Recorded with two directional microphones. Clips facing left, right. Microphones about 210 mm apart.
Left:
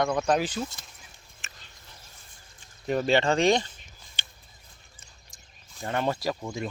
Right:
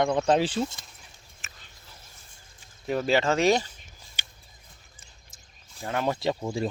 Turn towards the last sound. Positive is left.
turn(degrees=-30)  # may be behind; listen again after turning